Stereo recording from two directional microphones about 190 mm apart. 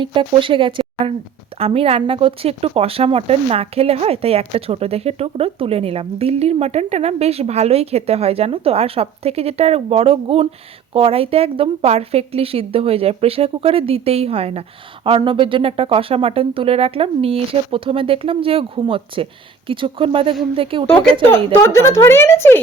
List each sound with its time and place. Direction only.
0.0 s speech: 25° right (ahead or behind)
21.6 s speech: 15° left (ahead or behind)